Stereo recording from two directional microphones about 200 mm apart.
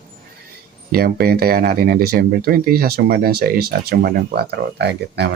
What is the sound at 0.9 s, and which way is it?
Speech, 50° right (ahead or behind).